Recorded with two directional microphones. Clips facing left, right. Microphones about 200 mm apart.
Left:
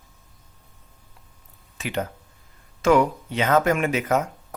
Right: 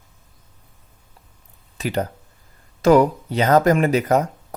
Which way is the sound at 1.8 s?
40° right (ahead or behind).